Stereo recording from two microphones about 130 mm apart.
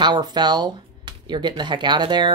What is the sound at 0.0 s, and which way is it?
Speech, 35° right (ahead or behind).